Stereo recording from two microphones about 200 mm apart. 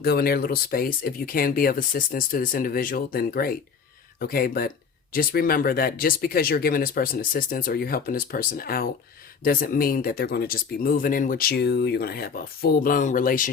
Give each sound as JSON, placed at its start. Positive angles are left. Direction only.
{"t": 0.0, "sound": "speech", "side_deg": 50}